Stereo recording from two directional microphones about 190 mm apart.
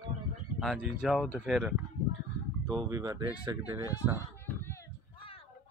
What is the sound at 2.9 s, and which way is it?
Speech, 20° right (ahead or behind).